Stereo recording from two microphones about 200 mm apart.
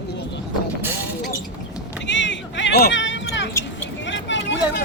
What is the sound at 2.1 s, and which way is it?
Vehicle, 65° left (ahead or behind).